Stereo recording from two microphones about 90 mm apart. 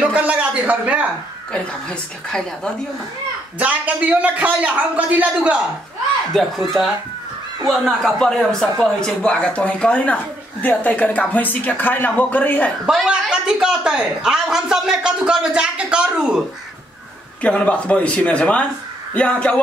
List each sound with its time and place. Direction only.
0.0 s a sound: 15° right (ahead or behind)
1.5 s speech: 10° left (ahead or behind)
3.5 s a man's voice: 15° right (ahead or behind)
6.3 s speech: centre (ahead or behind)
8.0 s speech: 5° left (ahead or behind)
12.8 s a man's voice: 10° right (ahead or behind)
17.4 s speech: 15° left (ahead or behind)